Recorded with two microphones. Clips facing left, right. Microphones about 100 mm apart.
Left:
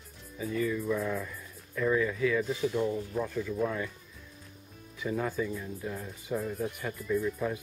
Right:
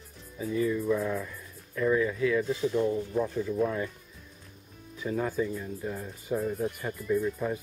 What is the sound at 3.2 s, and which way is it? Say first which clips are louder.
Speech: right 3 dB; 25° right (ahead or behind).